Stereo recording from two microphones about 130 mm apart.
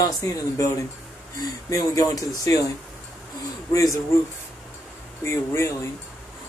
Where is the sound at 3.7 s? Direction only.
25° left (ahead or behind).